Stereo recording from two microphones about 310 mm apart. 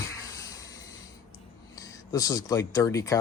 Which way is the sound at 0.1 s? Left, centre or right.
Centre.